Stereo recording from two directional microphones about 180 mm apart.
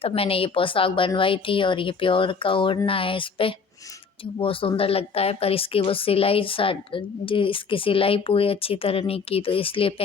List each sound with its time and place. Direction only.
0.0 s a woman's voice: 30° left (ahead or behind)